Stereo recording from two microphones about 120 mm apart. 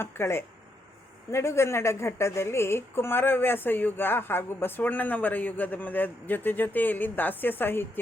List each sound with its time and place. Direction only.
0.0 s a woman's voice: 20° left (ahead or behind)